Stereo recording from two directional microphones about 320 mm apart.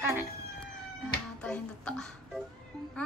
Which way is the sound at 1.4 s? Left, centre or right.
Centre.